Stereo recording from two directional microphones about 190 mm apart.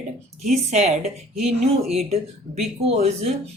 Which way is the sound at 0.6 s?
35° right (ahead or behind).